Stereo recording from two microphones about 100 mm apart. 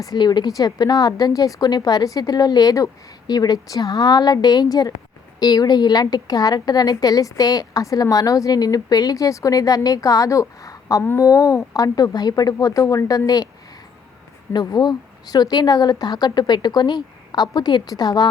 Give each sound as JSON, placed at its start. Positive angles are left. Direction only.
{"t": 0.0, "sound": "speech", "side_deg": 40}
{"t": 11.0, "sound": "speech", "side_deg": 25}
{"t": 11.3, "sound": "speech", "side_deg": 35}
{"t": 14.5, "sound": "speech", "side_deg": 40}